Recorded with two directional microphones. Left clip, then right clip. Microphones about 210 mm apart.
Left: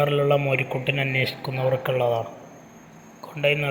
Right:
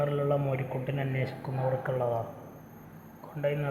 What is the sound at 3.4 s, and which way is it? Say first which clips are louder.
Speech: left 9 dB; 30° left (ahead or behind).